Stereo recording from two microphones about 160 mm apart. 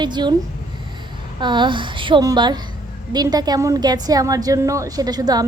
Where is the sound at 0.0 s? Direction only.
30° right (ahead or behind).